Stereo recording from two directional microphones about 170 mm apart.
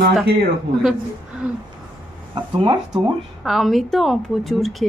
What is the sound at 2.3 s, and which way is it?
Speech, 25° right (ahead or behind).